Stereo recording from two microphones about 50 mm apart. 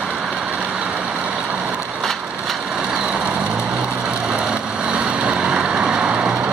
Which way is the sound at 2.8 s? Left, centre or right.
Centre.